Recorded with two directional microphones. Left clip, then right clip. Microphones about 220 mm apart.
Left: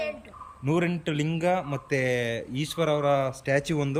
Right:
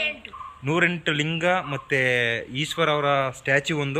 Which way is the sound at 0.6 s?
10° left (ahead or behind).